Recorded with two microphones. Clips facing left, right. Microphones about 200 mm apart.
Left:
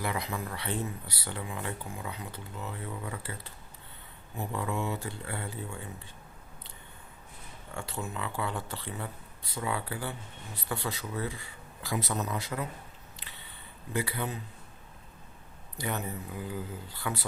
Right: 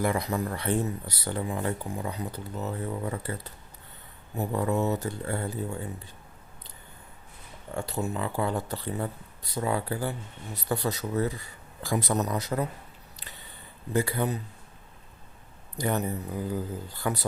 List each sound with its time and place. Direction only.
0.0 s speech: 45° right (ahead or behind)
7.8 s speech: 40° right (ahead or behind)
13.1 s a sound: 40° right (ahead or behind)
13.9 s speech: 45° right (ahead or behind)
15.8 s speech: 40° right (ahead or behind)